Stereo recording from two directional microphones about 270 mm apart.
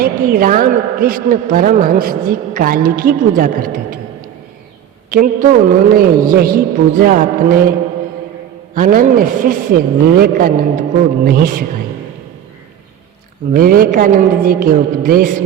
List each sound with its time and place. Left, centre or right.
0.0 s a woman's voice: right
5.1 s a woman's voice: right
8.7 s a woman's voice: right
13.5 s a woman's voice: right